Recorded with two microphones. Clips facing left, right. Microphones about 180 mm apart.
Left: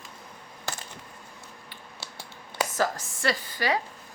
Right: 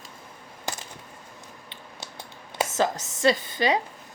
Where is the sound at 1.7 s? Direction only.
20° right (ahead or behind).